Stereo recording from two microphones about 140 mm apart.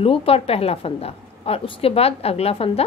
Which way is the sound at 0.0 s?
40° left (ahead or behind).